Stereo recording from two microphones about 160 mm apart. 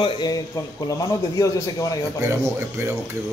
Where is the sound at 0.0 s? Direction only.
25° left (ahead or behind).